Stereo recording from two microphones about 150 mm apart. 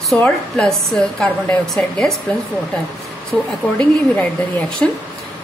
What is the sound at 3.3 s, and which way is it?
Speech, centre (ahead or behind).